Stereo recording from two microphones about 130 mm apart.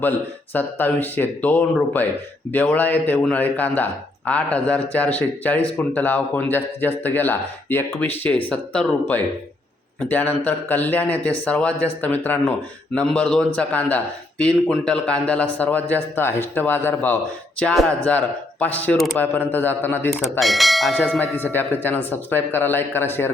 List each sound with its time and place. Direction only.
0.5 s speech: 15° left (ahead or behind)
20.4 s speech: centre (ahead or behind)
20.9 s speech: 15° left (ahead or behind)